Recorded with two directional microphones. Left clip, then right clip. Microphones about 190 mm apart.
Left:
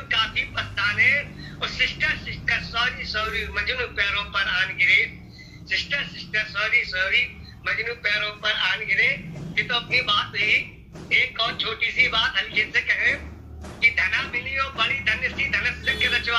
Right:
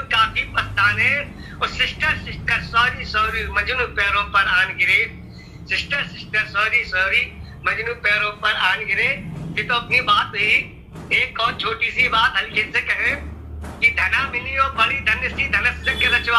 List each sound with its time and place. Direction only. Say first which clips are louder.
0.1 s a woman's voice: right 5 dB; 55° right (ahead or behind)